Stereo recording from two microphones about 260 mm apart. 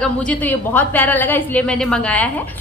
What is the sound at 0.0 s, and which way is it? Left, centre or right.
A woman's voice, centre.